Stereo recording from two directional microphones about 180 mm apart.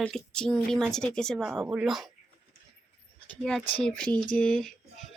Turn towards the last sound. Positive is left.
turn(degrees=0)  # may be behind; listen again after turning